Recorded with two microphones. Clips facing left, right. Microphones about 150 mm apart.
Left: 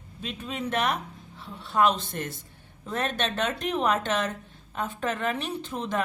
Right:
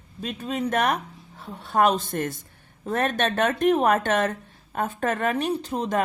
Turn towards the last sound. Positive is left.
turn(degrees=-40)  # may be behind; listen again after turning